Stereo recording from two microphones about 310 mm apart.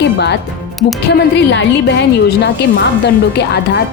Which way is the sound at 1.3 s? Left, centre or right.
Left.